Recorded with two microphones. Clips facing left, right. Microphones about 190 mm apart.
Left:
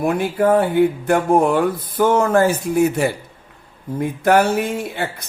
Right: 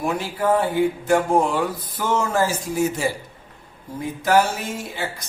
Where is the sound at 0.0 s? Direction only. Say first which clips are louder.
Left 6 dB; 60° left (ahead or behind).